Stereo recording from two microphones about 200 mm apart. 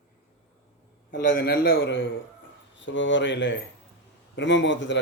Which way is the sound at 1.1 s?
45° left (ahead or behind).